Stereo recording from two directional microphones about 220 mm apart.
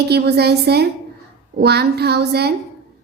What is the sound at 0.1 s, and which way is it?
A woman's voice, 50° right (ahead or behind).